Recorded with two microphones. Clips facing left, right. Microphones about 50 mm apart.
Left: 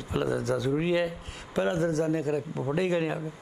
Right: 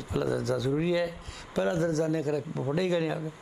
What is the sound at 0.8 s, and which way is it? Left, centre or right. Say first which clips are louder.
Speech: left 1 dB; left.